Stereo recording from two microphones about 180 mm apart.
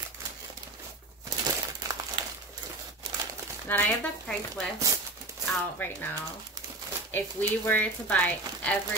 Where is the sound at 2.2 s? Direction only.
25° right (ahead or behind).